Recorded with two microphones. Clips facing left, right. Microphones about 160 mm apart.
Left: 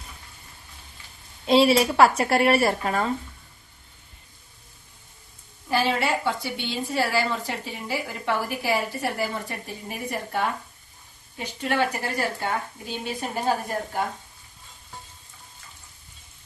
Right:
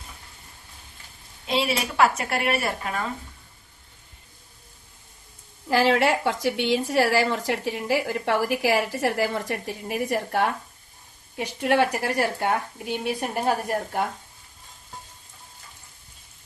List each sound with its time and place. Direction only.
1.5 s speech: 35° left (ahead or behind)
5.6 s a woman's voice: 85° right; by 13.7 s 65° right (ahead or behind)